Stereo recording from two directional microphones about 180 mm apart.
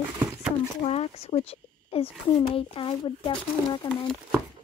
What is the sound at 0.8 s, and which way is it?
Speech, 35° left (ahead or behind).